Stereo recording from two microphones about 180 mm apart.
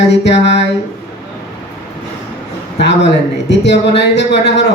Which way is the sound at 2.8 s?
70° left (ahead or behind).